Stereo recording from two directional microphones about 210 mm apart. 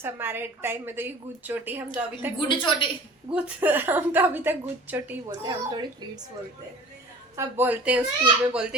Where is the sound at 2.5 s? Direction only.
25° left (ahead or behind).